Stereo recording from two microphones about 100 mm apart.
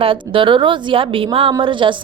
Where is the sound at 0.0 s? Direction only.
60° right (ahead or behind).